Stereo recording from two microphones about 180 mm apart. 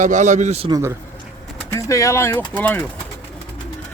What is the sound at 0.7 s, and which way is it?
Speech, 15° right (ahead or behind).